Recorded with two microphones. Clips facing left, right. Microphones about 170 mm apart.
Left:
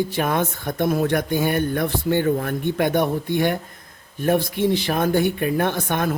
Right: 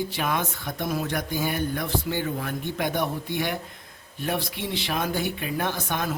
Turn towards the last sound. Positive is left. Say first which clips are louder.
# left 6 dB
turn(degrees=55)  # may be behind; listen again after turning